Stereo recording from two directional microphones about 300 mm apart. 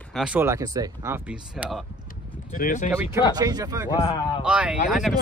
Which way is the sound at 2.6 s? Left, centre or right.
Left.